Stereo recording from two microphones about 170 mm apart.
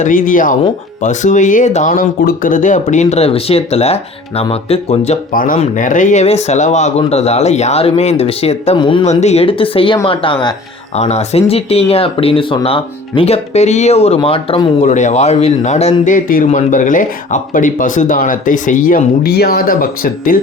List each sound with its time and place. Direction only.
0.0 s speech: 50° left (ahead or behind)
5.3 s speech: 55° left (ahead or behind); by 9.0 s 30° left (ahead or behind)
9.0 s speech: 40° left (ahead or behind)
10.9 s speech: 40° left (ahead or behind)
14.8 s speech: 45° left (ahead or behind)